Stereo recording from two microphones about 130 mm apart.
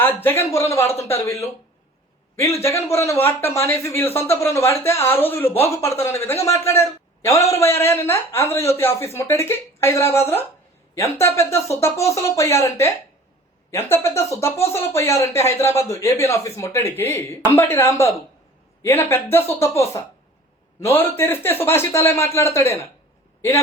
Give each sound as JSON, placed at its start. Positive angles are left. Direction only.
{"t": 0.2, "sound": "speech", "side_deg": 15}
{"t": 2.9, "sound": "speech", "side_deg": 20}
{"t": 20.9, "sound": "speech", "side_deg": 15}